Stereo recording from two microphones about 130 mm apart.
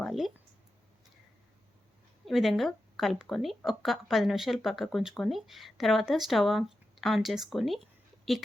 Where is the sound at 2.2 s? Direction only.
Centre (ahead or behind).